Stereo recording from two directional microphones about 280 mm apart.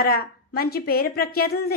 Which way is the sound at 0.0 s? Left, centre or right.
Left.